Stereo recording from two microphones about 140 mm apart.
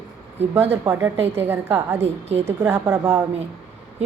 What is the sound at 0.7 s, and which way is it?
A woman's voice, 15° right (ahead or behind).